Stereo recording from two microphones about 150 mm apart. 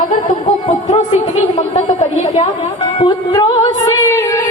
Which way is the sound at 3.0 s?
30° left (ahead or behind).